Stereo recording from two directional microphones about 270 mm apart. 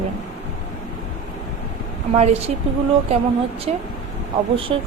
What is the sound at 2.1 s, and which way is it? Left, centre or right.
A woman's voice, right.